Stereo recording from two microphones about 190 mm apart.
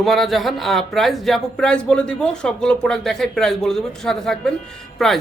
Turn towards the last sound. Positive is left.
turn(degrees=0)  # may be behind; listen again after turning